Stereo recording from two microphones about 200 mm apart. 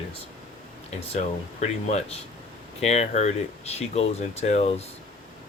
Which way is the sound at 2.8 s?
35° left (ahead or behind).